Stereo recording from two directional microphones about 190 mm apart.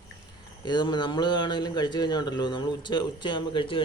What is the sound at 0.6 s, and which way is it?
Speech, 25° left (ahead or behind).